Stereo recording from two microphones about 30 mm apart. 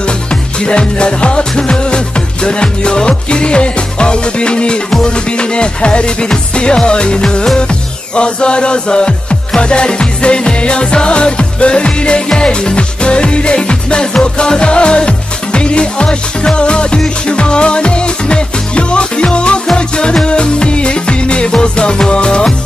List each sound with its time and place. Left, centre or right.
0.0 s music: left